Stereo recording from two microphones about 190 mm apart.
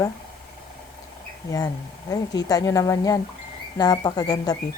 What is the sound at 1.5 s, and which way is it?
Speech, 20° left (ahead or behind).